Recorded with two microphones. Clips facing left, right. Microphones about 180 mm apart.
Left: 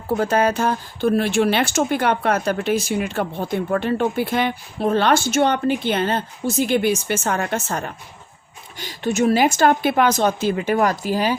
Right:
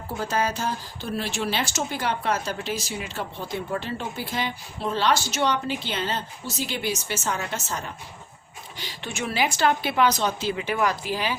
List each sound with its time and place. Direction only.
0.1 s speech: 60° left (ahead or behind)
8.8 s a woman's voice: 45° left (ahead or behind)